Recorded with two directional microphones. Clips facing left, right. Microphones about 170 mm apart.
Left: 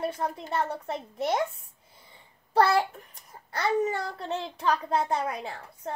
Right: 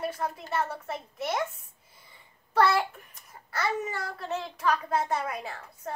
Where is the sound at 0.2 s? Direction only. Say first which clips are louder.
Left 1 dB; 30° left (ahead or behind).